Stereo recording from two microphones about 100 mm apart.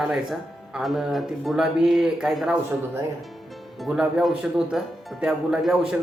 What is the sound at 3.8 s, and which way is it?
Speech, 5° right (ahead or behind).